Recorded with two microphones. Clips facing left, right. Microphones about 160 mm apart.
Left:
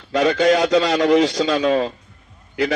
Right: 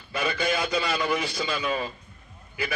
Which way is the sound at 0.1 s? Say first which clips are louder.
Left 11 dB; 90° left.